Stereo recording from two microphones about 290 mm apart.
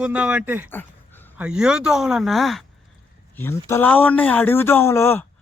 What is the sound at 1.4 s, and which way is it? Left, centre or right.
Speech, centre.